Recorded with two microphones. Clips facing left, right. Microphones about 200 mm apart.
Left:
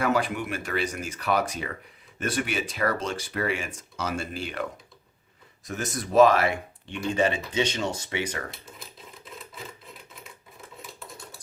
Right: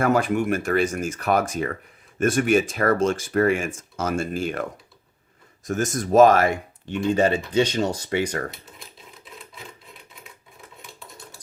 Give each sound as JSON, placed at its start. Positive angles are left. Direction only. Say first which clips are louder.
{"t": 0.0, "sound": "speech", "louder": "right 5 dB", "side_deg": -45}
{"t": 5.6, "sound": "speech", "louder": "right 7 dB", "side_deg": -45}
{"t": 8.4, "sound": "sewing machine", "louder": "right 4 dB", "side_deg": 0}